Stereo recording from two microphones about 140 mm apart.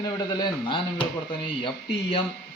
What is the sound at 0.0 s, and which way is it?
Speech, 25° left (ahead or behind).